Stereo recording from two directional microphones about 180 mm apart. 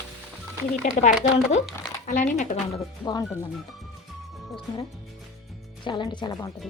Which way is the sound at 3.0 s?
20° left (ahead or behind).